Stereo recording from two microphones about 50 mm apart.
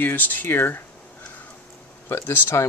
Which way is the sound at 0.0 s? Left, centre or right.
Left.